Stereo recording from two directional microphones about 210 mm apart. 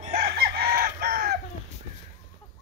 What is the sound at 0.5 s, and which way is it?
Chicken, 45° right (ahead or behind).